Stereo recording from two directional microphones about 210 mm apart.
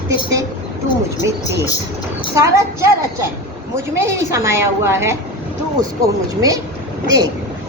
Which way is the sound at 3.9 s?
15° right (ahead or behind).